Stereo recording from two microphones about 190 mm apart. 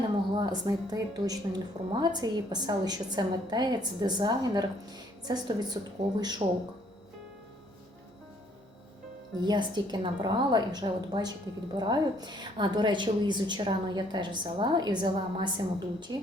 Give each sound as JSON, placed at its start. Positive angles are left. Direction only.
{"t": 0.3, "sound": "a woman's voice", "side_deg": -20}
{"t": 9.4, "sound": "a woman's voice", "side_deg": -25}